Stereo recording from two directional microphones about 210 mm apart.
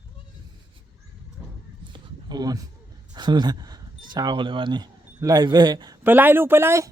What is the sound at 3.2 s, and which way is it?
Speech, 20° right (ahead or behind).